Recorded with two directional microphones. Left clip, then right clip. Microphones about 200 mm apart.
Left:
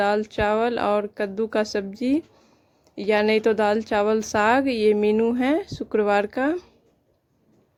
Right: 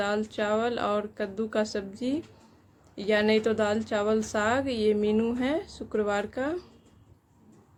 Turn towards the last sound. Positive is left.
turn(degrees=35)  # may be behind; listen again after turning